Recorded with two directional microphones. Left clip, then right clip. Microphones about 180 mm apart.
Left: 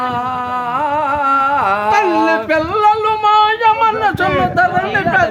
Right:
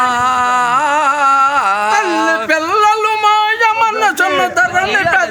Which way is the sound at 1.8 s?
15° right (ahead or behind).